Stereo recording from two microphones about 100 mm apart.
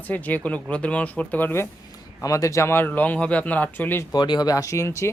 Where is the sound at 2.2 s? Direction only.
35° left (ahead or behind); by 4.0 s 20° left (ahead or behind).